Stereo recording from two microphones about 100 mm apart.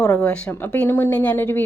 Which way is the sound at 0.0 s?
10° left (ahead or behind).